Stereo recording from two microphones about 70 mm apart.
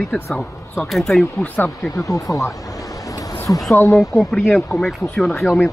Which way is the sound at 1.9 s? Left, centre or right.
Left.